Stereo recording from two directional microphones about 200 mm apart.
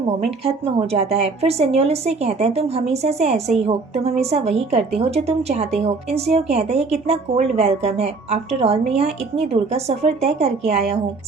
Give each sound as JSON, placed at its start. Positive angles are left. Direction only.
{"t": 0.3, "sound": "a woman's voice", "side_deg": -30}